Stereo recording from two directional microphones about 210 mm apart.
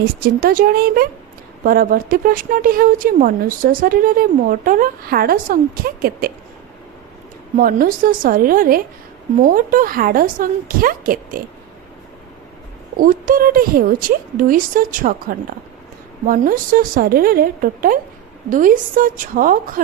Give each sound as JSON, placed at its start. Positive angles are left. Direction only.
{"t": 0.0, "sound": "speech", "side_deg": -45}
{"t": 7.5, "sound": "a woman's voice", "side_deg": -40}
{"t": 13.0, "sound": "a woman's voice", "side_deg": -40}